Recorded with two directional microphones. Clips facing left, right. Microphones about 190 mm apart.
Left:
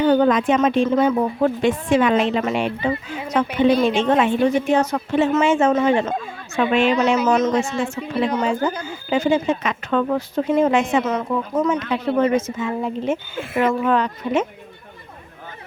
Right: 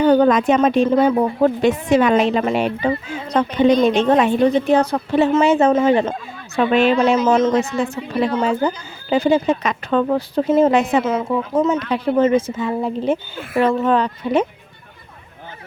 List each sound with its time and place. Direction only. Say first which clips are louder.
0.0 s speech: right 2 dB; 40° right (ahead or behind)
3.5 s speech: right 3 dB; 5° left (ahead or behind)
3.8 s speech: right 3 dB; 40° right (ahead or behind)